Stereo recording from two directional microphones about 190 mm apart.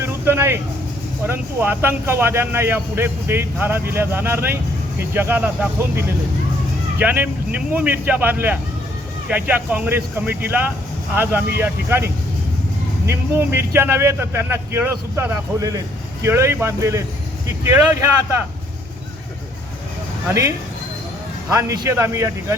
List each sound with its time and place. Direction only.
0.0 s vehicle: 15° right (ahead or behind)
1.2 s speech: 10° right (ahead or behind)
20.2 s speech: 15° right (ahead or behind)
21.5 s speech: 15° right (ahead or behind)